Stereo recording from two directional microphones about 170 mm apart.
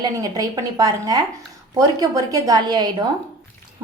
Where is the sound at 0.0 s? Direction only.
25° right (ahead or behind).